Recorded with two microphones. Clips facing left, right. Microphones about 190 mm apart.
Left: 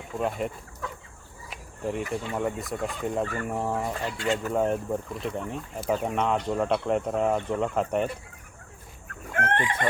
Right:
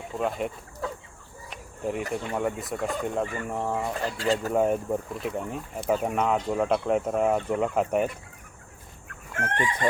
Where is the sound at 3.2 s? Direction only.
15° right (ahead or behind).